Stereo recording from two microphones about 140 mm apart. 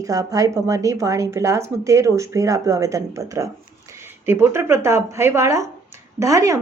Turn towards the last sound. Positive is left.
turn(degrees=-20)  # may be behind; listen again after turning